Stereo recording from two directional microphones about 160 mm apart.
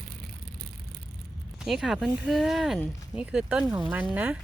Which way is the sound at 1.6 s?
Centre (ahead or behind).